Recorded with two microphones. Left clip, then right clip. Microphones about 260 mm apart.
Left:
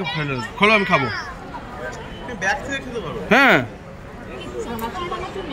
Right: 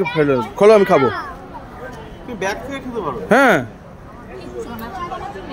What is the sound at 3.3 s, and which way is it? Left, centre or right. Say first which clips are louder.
Speech: right 1 dB; centre.